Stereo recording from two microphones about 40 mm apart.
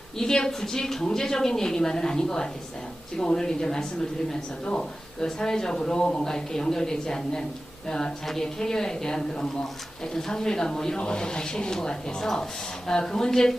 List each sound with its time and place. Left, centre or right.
0.2 s speech: centre